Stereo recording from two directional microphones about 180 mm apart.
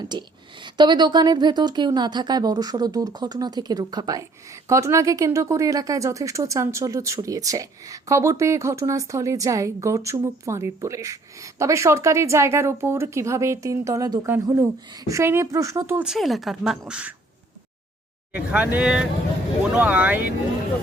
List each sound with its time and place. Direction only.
0.0 s speech: 25° right (ahead or behind)
16.1 s speech: centre (ahead or behind)
18.3 s speech: 10° right (ahead or behind)